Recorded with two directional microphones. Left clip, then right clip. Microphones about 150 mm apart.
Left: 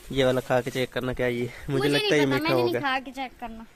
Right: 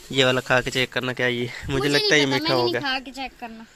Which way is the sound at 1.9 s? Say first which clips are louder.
Right 4 dB; 15° left (ahead or behind).